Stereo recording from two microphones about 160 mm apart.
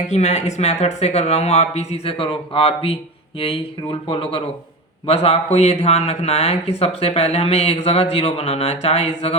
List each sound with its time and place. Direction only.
0.1 s speech: 45° left (ahead or behind)